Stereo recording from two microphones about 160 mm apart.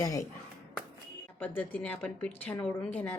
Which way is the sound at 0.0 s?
20° left (ahead or behind).